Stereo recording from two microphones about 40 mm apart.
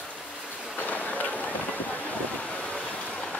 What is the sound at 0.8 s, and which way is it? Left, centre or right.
Run, left.